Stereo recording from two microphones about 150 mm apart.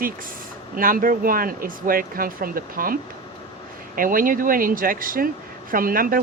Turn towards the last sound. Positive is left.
turn(degrees=-70)  # may be behind; listen again after turning